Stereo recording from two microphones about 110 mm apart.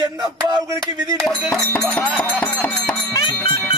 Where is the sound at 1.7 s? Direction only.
10° left (ahead or behind).